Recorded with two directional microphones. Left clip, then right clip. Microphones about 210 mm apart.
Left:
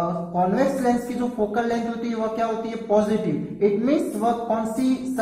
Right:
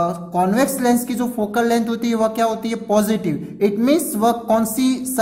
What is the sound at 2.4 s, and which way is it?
Speech, 40° right (ahead or behind).